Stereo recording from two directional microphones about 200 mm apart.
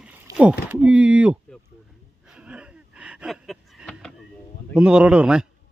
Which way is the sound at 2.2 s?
5° right (ahead or behind).